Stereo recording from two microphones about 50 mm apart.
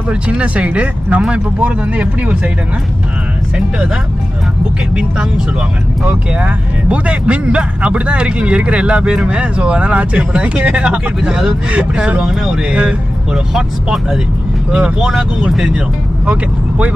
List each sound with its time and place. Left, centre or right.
0.1 s speech: right
6.4 s speech: right
16.3 s speech: right